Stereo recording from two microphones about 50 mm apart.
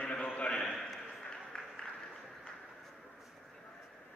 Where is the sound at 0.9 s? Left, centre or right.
Centre.